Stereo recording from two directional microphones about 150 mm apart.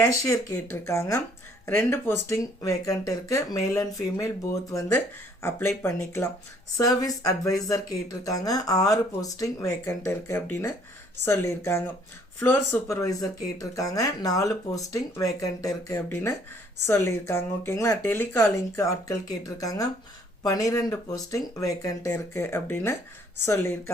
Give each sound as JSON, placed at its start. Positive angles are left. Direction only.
{"t": 0.0, "sound": "speech", "side_deg": 20}